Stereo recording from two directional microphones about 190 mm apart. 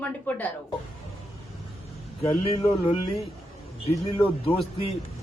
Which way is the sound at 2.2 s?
35° left (ahead or behind).